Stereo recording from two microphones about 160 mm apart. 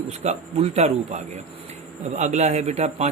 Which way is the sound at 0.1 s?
40° right (ahead or behind).